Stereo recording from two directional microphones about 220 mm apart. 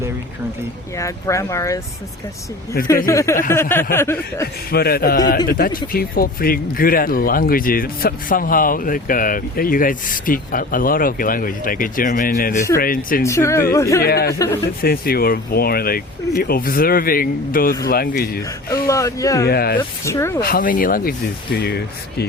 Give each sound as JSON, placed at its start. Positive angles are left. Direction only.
{"t": 0.9, "sound": "speech", "side_deg": 15}
{"t": 2.8, "sound": "speech", "side_deg": 45}
{"t": 3.1, "sound": "speech", "side_deg": 15}
{"t": 4.7, "sound": "speech", "side_deg": 45}
{"t": 13.2, "sound": "speech", "side_deg": 15}
{"t": 14.0, "sound": "speech", "side_deg": 45}
{"t": 14.3, "sound": "speech", "side_deg": 15}
{"t": 14.8, "sound": "speech", "side_deg": 45}
{"t": 18.9, "sound": "speech", "side_deg": 15}
{"t": 19.5, "sound": "speech", "side_deg": 45}
{"t": 20.1, "sound": "speech", "side_deg": 10}
{"t": 20.4, "sound": "speech", "side_deg": 40}